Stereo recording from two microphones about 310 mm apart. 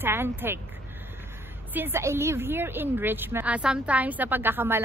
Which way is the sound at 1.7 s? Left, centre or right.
Centre.